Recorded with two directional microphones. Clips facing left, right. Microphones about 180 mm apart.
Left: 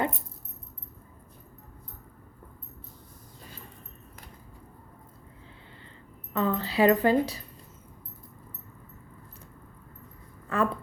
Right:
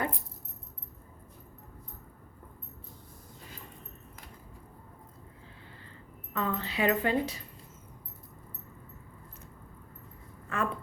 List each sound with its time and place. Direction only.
6.3 s speech: 30° left (ahead or behind)
10.5 s speech: 35° left (ahead or behind)